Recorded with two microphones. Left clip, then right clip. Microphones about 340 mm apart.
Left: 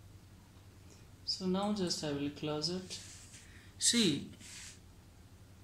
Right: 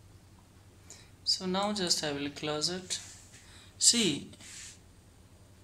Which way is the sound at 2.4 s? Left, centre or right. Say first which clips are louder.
Right 5 dB; right.